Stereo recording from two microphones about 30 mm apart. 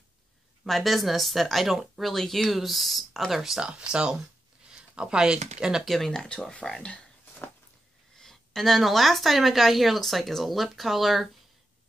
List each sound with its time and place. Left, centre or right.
0.7 s speech: centre
2.1 s speech: centre
2.5 s speech: centre
3.5 s speech: right
5.9 s speech: centre
6.5 s speech: left
8.2 s a woman's voice: centre